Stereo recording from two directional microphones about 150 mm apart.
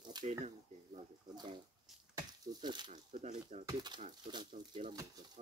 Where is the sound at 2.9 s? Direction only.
50° right (ahead or behind).